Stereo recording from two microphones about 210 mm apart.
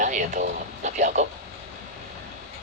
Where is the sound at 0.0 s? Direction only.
40° right (ahead or behind).